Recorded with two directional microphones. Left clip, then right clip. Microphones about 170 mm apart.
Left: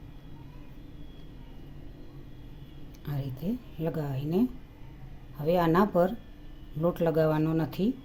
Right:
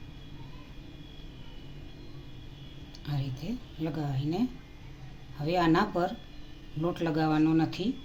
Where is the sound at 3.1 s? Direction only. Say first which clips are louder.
Left 2 dB; 65° left (ahead or behind).